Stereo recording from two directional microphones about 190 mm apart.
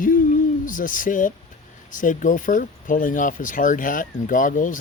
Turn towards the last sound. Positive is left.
turn(degrees=45)  # may be behind; listen again after turning